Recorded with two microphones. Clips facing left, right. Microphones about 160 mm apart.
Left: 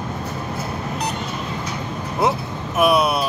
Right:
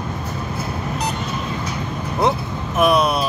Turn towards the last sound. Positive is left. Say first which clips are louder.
# right 1 dB
turn(degrees=0)  # may be behind; listen again after turning